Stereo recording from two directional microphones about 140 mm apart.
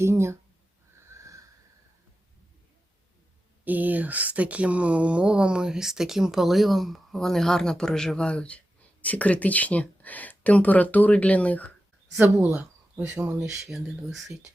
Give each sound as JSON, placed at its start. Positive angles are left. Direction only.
{"t": 0.0, "sound": "speech", "side_deg": -20}
{"t": 1.1, "sound": "a sound", "side_deg": -20}
{"t": 3.6, "sound": "speech", "side_deg": -10}
{"t": 12.2, "sound": "speech", "side_deg": -10}
{"t": 13.7, "sound": "speech", "side_deg": 0}